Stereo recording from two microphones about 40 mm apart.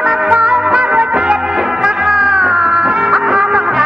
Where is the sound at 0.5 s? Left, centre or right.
Centre.